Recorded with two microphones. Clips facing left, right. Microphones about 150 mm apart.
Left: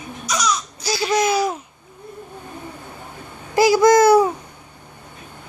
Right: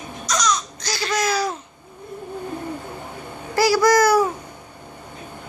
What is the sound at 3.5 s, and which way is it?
Babbling, 20° left (ahead or behind).